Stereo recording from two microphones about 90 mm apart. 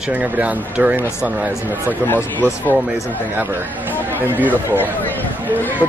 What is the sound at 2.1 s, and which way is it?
Speech, 20° left (ahead or behind).